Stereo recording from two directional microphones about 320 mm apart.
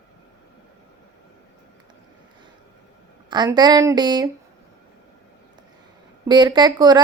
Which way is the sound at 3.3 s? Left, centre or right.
Centre.